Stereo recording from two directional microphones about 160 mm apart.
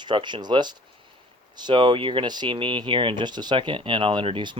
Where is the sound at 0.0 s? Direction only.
30° right (ahead or behind).